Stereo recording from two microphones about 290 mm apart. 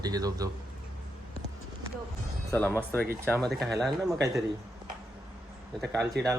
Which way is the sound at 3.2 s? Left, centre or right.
Centre.